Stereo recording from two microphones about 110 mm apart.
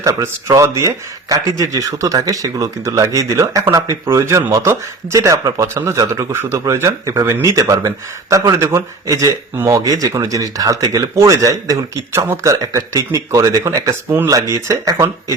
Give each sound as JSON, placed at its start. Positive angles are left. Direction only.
{"t": 0.0, "sound": "speech", "side_deg": -25}